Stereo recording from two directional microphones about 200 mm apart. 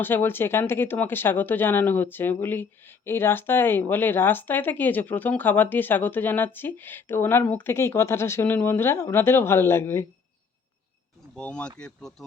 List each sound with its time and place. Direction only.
0.0 s speech: 10° left (ahead or behind)
11.3 s speech: 5° left (ahead or behind)